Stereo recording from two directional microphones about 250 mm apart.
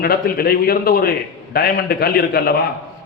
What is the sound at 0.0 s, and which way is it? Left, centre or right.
A man's voice, left.